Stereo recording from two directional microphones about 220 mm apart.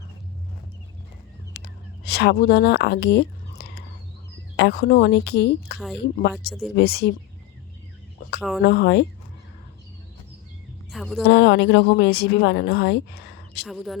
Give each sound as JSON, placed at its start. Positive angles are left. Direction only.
{"t": 1.5, "sound": "a sound", "side_deg": 45}
{"t": 2.0, "sound": "a woman's voice", "side_deg": 45}
{"t": 6.5, "sound": "speech", "side_deg": 0}
{"t": 6.7, "sound": "a woman's voice", "side_deg": 45}
{"t": 8.4, "sound": "speech", "side_deg": -5}
{"t": 8.6, "sound": "a woman's voice", "side_deg": 45}
{"t": 10.9, "sound": "a woman's voice", "side_deg": 0}
{"t": 11.2, "sound": "a woman's voice", "side_deg": 50}
{"t": 13.7, "sound": "speech", "side_deg": 0}